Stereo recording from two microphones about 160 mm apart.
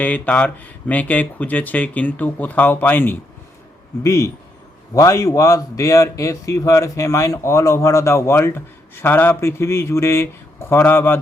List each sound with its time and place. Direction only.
0.0 s a man's voice: 10° left (ahead or behind)